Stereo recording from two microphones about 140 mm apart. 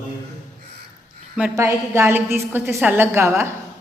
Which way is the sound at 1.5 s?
20° right (ahead or behind).